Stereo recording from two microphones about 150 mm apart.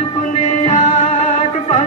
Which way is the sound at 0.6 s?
50° left (ahead or behind).